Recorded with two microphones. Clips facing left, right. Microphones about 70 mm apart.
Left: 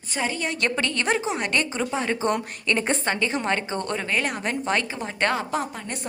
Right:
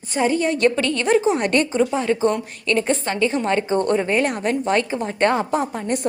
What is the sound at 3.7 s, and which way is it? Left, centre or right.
Speech, right.